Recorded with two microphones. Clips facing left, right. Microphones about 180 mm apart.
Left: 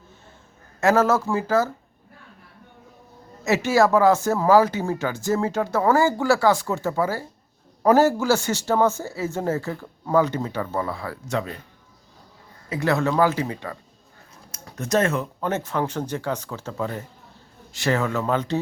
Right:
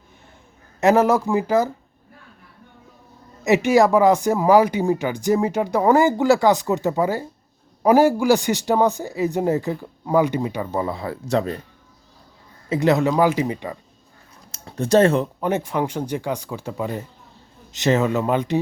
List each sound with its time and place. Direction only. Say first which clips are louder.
0.8 s speech: right 3 dB; 15° right (ahead or behind)
3.4 s speech: right 3 dB; 15° right (ahead or behind)
11.3 s speech: right 6 dB; 35° right (ahead or behind)
12.6 s speech: right 4 dB; 25° right (ahead or behind)
14.5 s speech: right 6 dB; 30° right (ahead or behind)
15.4 s speech: right 3 dB; 15° right (ahead or behind)